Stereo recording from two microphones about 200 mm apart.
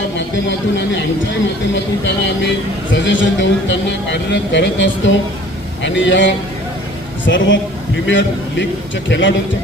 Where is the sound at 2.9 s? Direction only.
65° left (ahead or behind).